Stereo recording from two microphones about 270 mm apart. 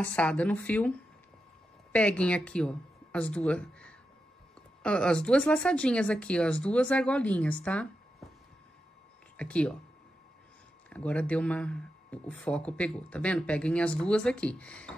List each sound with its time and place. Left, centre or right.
0.0 s speech: centre
7.6 s a sound: centre
9.4 s speech: centre
10.9 s speech: centre